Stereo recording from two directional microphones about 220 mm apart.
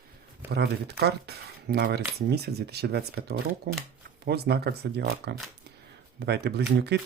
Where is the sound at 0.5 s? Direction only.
50° right (ahead or behind).